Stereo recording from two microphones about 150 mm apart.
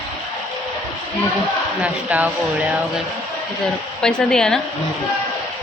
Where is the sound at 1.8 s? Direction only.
10° right (ahead or behind).